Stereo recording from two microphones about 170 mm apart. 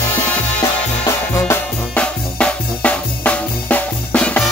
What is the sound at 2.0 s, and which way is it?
Music, 5° left (ahead or behind).